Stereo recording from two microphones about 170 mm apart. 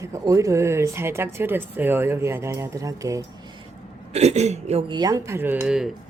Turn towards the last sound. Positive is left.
turn(degrees=-5)  # may be behind; listen again after turning